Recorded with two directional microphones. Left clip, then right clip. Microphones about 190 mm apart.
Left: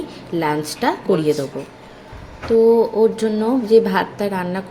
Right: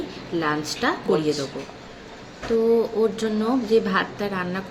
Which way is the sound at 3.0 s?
20° left (ahead or behind).